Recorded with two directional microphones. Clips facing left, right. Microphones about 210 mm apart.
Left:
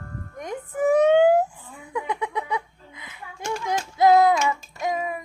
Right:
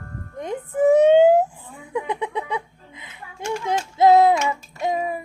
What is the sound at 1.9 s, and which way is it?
Music, 30° right (ahead or behind).